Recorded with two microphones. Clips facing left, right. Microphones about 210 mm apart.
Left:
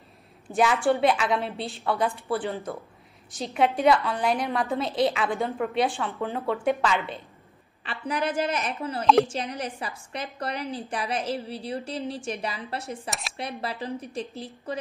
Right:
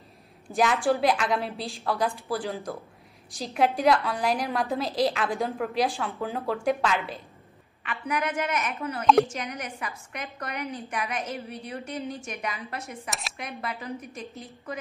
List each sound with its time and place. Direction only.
0.5 s a woman's voice: centre (ahead or behind)
7.8 s a woman's voice: 30° left (ahead or behind)